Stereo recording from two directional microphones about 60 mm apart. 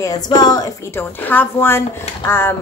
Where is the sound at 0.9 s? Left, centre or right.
Left.